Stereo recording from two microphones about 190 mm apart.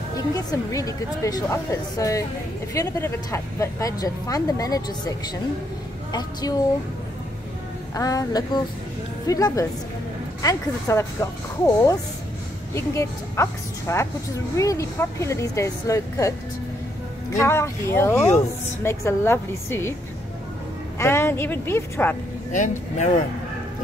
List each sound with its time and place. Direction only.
0.3 s speech: 20° left (ahead or behind)
7.9 s speech: 20° left (ahead or behind)
21.0 s speech: 15° left (ahead or behind)
22.5 s speech: 40° left (ahead or behind)